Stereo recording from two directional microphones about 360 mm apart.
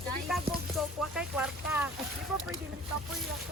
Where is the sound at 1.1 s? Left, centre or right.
Centre.